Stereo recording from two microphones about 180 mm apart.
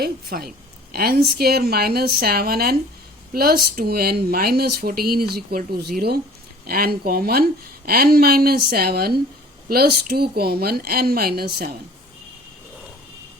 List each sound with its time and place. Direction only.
0.0 s speech: 55° right (ahead or behind)